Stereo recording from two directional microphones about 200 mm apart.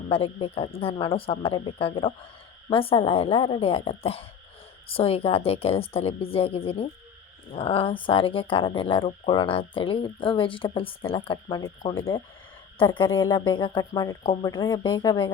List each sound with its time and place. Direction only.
0.1 s speech: 30° left (ahead or behind)